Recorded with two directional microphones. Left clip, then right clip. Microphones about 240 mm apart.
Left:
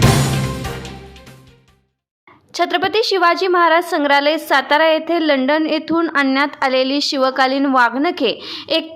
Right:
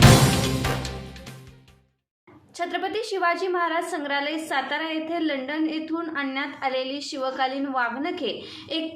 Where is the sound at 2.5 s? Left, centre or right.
Left.